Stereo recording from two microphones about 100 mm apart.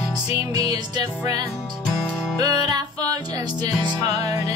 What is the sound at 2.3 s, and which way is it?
Music, 40° right (ahead or behind).